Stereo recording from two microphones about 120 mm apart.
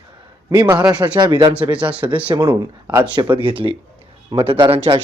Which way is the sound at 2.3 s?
30° right (ahead or behind).